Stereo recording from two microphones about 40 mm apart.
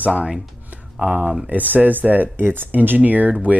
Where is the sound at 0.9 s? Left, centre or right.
Right.